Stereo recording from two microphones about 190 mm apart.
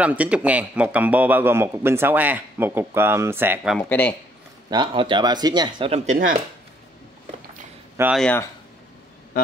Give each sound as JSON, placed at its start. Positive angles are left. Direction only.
{"t": 0.0, "sound": "a man's voice", "side_deg": -5}
{"t": 3.7, "sound": "speech", "side_deg": 10}
{"t": 4.6, "sound": "speech", "side_deg": -25}
{"t": 6.0, "sound": "speech", "side_deg": -45}
{"t": 8.0, "sound": "speech", "side_deg": -5}